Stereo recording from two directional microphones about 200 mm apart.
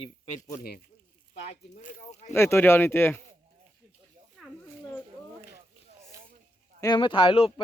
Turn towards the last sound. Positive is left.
turn(degrees=25)  # may be behind; listen again after turning